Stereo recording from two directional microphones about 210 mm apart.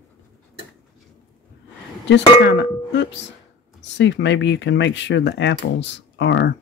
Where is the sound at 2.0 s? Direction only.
55° left (ahead or behind).